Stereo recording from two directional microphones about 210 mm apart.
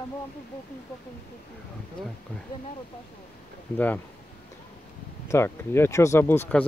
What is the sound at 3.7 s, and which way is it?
Speech, 10° left (ahead or behind).